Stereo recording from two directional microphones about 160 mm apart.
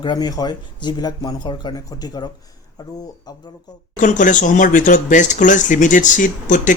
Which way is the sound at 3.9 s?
50° left (ahead or behind).